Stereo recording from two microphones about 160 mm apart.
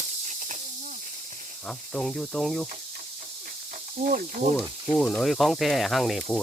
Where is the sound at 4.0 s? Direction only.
60° right (ahead or behind).